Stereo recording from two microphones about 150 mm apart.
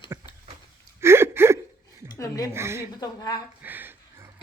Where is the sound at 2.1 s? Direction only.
25° left (ahead or behind).